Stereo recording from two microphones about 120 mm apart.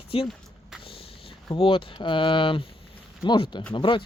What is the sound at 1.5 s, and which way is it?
Speech, 45° left (ahead or behind).